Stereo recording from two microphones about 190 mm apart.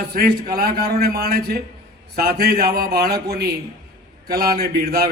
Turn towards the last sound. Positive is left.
turn(degrees=-55)  # may be behind; listen again after turning